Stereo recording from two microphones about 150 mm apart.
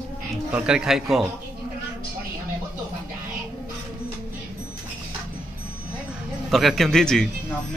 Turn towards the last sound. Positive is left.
turn(degrees=5)  # may be behind; listen again after turning